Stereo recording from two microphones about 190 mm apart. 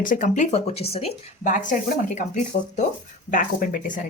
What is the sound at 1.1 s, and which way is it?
Speech, 45° left (ahead or behind).